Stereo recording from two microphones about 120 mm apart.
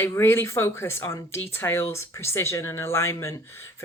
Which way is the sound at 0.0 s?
20° left (ahead or behind).